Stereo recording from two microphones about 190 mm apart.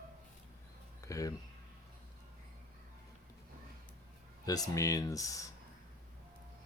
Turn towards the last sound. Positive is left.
turn(degrees=15)  # may be behind; listen again after turning